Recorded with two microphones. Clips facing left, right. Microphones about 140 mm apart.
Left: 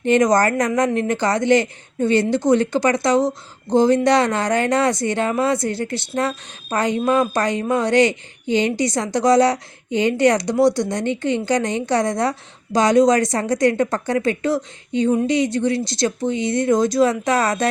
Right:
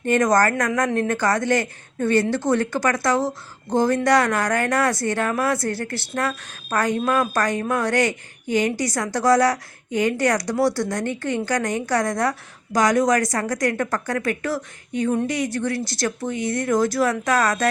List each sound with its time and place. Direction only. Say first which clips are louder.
0.0 s speech: left 3 dB; 20° left (ahead or behind)